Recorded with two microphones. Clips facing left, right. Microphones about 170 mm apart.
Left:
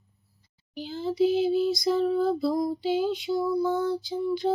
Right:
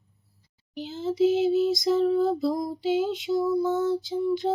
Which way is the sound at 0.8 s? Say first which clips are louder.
Right 1 dB; 20° right (ahead or behind).